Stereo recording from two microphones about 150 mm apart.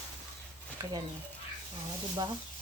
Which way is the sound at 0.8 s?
25° right (ahead or behind).